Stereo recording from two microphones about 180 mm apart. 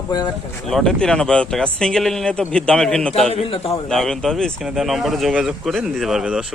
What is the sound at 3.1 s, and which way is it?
Speech, 35° left (ahead or behind).